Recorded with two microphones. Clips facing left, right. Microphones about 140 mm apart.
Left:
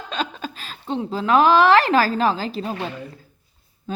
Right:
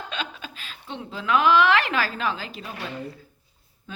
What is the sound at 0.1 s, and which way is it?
A woman's voice, 40° left (ahead or behind).